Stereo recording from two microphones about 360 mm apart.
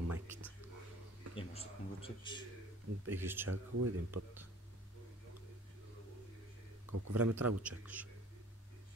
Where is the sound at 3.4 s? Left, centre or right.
Right.